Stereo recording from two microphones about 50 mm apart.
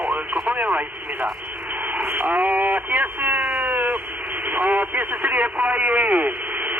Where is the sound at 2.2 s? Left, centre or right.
Right.